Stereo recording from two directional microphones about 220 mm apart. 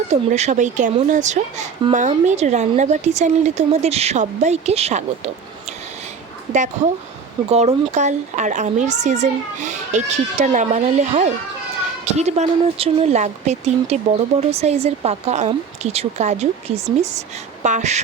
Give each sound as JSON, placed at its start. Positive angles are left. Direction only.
{"t": 0.1, "sound": "a woman's voice", "side_deg": -30}
{"t": 7.9, "sound": "a woman's voice", "side_deg": -35}